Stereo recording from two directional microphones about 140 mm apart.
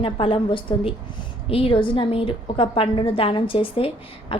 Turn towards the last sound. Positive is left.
turn(degrees=40)  # may be behind; listen again after turning